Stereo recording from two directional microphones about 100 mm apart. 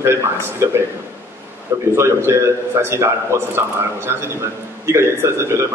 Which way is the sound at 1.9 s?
25° right (ahead or behind).